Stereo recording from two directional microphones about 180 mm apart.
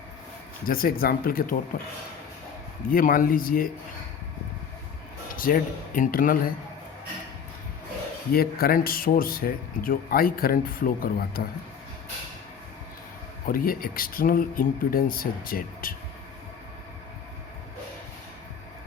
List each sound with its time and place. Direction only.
0.6 s speech: 50° left (ahead or behind)
2.9 s speech: 50° left (ahead or behind)
5.4 s speech: 50° left (ahead or behind)
8.3 s speech: 55° left (ahead or behind)
13.5 s speech: 55° left (ahead or behind)